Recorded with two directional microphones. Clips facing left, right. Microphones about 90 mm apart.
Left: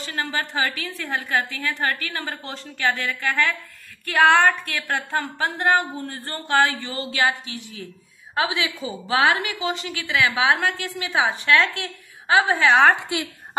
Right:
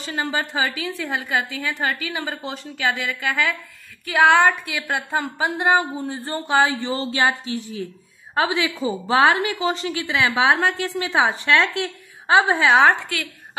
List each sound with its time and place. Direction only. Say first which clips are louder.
0.0 s a woman's voice: right 2 dB; 20° right (ahead or behind)
0.7 s a woman's voice: right 2 dB; 5° right (ahead or behind); by 12.5 s 30° right (ahead or behind)
13.0 s a woman's voice: left 2 dB; 20° left (ahead or behind)